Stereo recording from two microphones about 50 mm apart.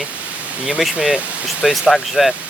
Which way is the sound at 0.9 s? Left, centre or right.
Centre.